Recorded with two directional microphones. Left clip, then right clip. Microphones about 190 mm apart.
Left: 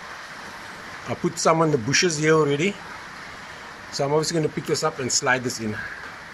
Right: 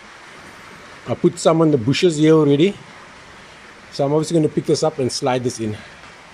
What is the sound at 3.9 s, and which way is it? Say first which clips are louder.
Speech: right 4 dB; 15° right (ahead or behind).